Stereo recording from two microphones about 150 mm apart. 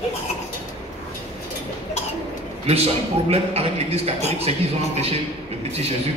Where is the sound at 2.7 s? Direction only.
40° right (ahead or behind).